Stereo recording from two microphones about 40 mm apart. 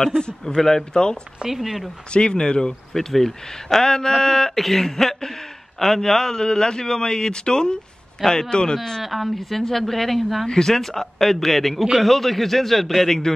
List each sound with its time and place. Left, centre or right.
0.0 s speech: centre
1.4 s speech: centre
2.1 s speech: left
2.9 s speech: centre
9.0 s a man's voice: centre